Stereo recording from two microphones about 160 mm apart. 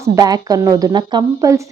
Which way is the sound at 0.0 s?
20° right (ahead or behind).